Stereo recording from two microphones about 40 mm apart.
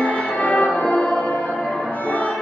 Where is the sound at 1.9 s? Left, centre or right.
Left.